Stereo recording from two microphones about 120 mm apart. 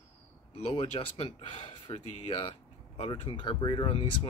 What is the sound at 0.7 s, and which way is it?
Speech, 45° left (ahead or behind).